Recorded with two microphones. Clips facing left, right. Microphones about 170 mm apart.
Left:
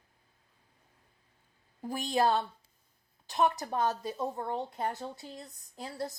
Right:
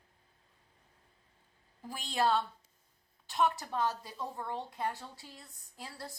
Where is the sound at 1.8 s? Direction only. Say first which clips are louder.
Left 8 dB; 45° left (ahead or behind).